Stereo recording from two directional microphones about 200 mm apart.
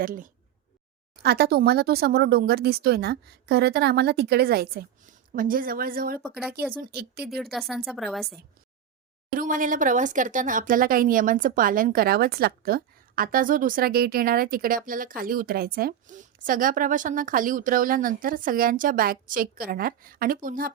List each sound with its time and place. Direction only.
0.0 s speech: 45° right (ahead or behind)
7.9 s a woman's voice: centre (ahead or behind)
9.3 s speech: 40° right (ahead or behind)